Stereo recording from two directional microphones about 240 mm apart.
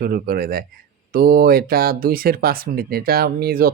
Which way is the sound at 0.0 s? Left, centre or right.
Right.